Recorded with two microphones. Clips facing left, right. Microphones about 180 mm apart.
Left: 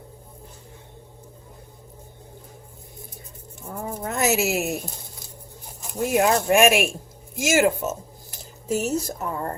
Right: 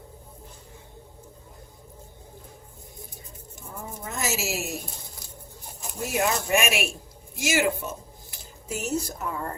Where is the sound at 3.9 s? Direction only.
65° left (ahead or behind).